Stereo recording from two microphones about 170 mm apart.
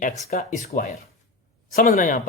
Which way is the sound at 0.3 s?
45° left (ahead or behind).